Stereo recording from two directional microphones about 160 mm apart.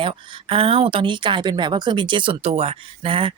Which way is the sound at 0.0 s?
35° right (ahead or behind).